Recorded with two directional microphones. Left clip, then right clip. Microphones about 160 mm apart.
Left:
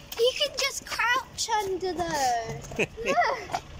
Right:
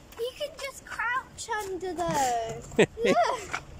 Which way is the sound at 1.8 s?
Centre (ahead or behind).